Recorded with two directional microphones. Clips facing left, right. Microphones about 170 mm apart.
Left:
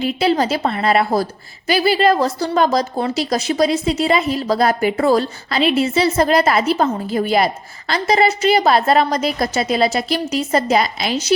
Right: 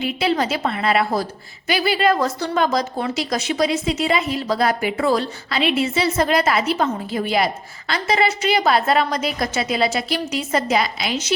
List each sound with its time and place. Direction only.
0.0 s a woman's voice: 35° left (ahead or behind)